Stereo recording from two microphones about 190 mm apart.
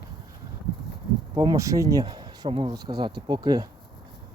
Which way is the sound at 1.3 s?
20° right (ahead or behind).